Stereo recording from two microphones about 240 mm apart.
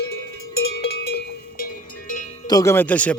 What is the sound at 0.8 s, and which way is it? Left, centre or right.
Cowbell, left.